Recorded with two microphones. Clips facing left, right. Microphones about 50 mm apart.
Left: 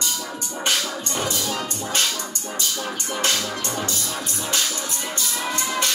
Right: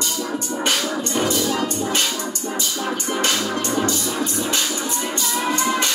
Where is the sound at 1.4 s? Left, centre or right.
Centre.